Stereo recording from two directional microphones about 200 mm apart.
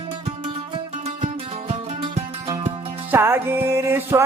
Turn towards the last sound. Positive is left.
turn(degrees=-10)  # may be behind; listen again after turning